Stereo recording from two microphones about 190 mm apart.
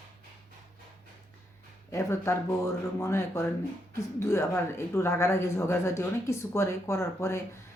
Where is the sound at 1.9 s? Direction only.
15° left (ahead or behind).